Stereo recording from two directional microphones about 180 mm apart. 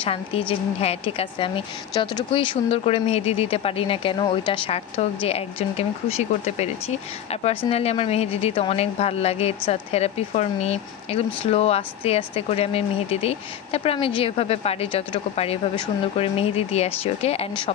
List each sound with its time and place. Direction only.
0.0 s a woman's voice: 30° left (ahead or behind)